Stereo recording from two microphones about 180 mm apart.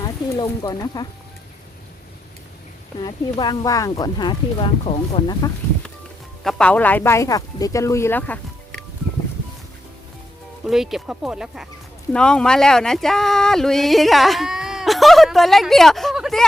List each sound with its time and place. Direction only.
0.0 s snake: 20° left (ahead or behind)
0.6 s speech: 20° left (ahead or behind)
3.0 s speech: 25° left (ahead or behind)
6.4 s speech: 5° left (ahead or behind)
10.6 s speech: centre (ahead or behind)